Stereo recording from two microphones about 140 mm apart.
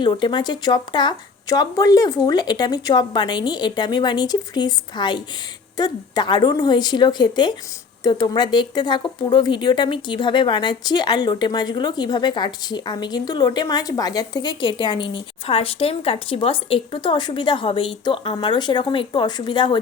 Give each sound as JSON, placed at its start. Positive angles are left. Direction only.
{"t": 0.0, "sound": "speech", "side_deg": 35}